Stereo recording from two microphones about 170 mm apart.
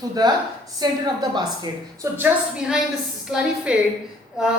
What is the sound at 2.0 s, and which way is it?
A woman's voice, 10° right (ahead or behind).